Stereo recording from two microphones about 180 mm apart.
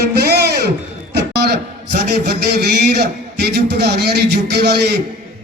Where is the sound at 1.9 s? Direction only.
65° right (ahead or behind).